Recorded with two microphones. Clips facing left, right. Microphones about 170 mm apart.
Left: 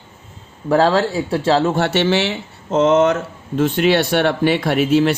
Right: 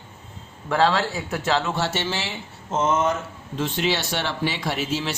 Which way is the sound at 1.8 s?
65° left (ahead or behind).